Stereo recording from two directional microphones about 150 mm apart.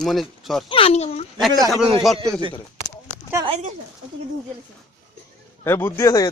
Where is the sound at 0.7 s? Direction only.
40° left (ahead or behind).